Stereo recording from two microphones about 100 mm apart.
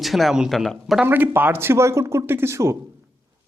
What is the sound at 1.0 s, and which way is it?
Speech, 20° right (ahead or behind).